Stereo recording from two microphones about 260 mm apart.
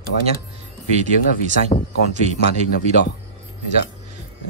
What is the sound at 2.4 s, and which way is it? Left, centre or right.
Speech, left.